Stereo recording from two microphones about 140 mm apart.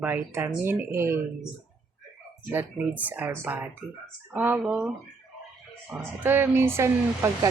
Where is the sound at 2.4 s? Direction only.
15° right (ahead or behind).